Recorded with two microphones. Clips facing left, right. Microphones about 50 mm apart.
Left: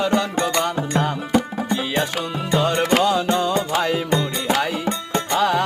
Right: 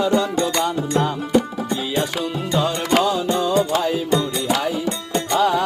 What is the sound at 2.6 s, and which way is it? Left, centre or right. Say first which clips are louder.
Music: left 1 dB; left.